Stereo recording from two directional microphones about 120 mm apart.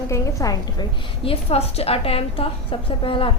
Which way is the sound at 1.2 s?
50° left (ahead or behind).